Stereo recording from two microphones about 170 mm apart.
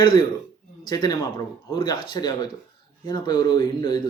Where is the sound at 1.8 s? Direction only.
25° left (ahead or behind).